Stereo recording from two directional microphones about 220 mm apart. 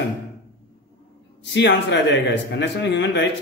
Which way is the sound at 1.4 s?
55° left (ahead or behind).